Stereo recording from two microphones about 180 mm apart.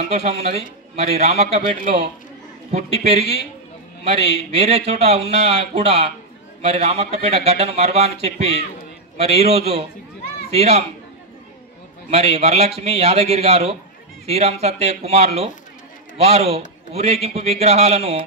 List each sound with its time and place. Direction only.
0.1 s speech: 35° right (ahead or behind)
12.1 s speech: 35° right (ahead or behind)